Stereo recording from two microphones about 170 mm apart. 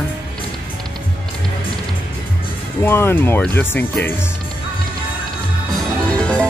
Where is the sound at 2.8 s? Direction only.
15° left (ahead or behind).